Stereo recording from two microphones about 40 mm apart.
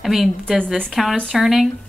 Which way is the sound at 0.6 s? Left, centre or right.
Left.